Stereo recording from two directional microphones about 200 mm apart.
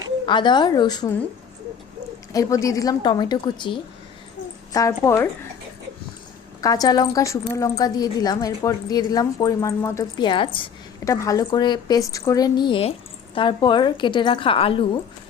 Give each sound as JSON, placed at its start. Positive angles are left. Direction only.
{"t": 0.3, "sound": "a woman's voice", "side_deg": 25}
{"t": 2.3, "sound": "a woman's voice", "side_deg": 15}
{"t": 6.6, "sound": "a woman's voice", "side_deg": 20}